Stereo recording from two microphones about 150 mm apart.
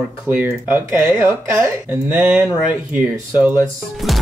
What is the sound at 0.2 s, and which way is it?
Speech, 10° right (ahead or behind).